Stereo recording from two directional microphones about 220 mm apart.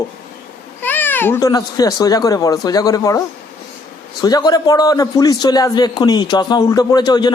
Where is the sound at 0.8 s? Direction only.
10° left (ahead or behind).